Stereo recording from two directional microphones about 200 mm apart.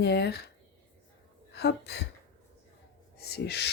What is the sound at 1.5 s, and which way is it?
Speech, 55° left (ahead or behind).